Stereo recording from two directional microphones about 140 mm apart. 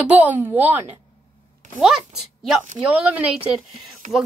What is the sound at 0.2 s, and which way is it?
Speech, 10° right (ahead or behind).